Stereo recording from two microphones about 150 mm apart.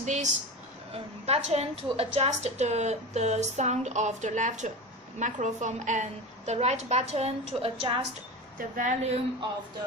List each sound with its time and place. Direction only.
0.0 s a woman's voice: 55° right (ahead or behind); by 8.0 s 35° right (ahead or behind)
8.5 s a woman's voice: 65° right (ahead or behind)